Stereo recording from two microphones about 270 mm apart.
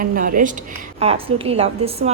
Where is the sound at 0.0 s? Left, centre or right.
Right.